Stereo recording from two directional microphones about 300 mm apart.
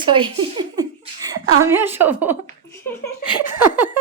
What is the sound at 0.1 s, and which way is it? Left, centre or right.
A woman's voice, centre.